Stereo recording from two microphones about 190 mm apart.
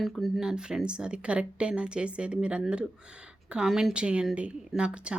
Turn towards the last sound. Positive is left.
turn(degrees=-5)  # may be behind; listen again after turning